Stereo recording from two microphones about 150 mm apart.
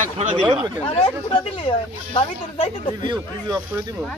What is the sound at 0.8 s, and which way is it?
Speech, 35° left (ahead or behind).